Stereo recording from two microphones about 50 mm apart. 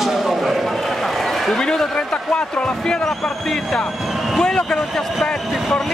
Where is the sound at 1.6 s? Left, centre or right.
Centre.